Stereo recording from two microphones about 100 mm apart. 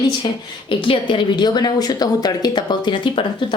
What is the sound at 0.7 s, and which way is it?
A woman's voice, 55° left (ahead or behind).